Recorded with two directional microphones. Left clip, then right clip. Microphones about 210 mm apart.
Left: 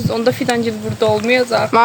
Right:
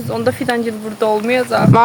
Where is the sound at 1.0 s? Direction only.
10° left (ahead or behind).